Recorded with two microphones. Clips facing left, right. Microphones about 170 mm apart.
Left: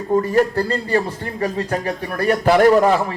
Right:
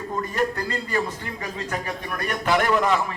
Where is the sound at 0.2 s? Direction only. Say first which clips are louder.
Left 6 dB; 35° left (ahead or behind).